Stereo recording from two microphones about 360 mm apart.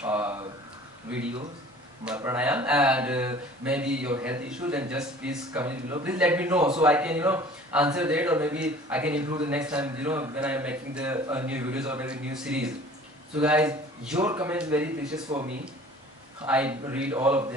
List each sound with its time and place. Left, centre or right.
0.0 s a sound: centre
2.0 s speech: centre
16.4 s speech: centre